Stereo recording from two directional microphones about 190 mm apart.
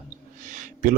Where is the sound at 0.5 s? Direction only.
40° right (ahead or behind).